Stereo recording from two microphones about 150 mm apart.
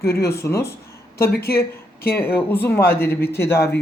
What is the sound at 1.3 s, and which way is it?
Speech, 90° left.